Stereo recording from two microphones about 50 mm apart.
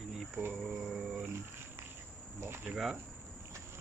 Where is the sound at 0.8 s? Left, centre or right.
Centre.